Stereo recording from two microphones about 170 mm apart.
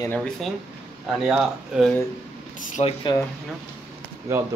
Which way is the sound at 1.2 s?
5° right (ahead or behind).